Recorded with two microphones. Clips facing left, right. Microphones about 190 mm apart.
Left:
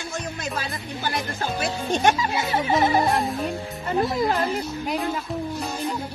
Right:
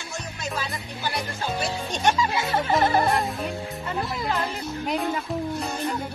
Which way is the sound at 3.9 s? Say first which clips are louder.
Left 8 dB; 25° left (ahead or behind).